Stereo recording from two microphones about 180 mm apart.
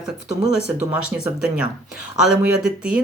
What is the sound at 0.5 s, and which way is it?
Speech, 5° right (ahead or behind).